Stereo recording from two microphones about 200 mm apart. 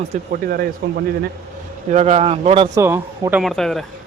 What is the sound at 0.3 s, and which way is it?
Speech, 50° right (ahead or behind).